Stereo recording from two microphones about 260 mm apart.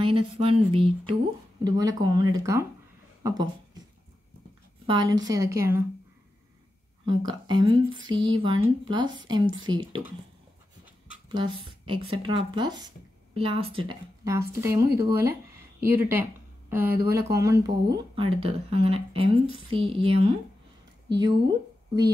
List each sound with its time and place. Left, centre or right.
0.0 s speech: right
4.8 s speech: centre
7.1 s speech: centre
11.6 s speech: centre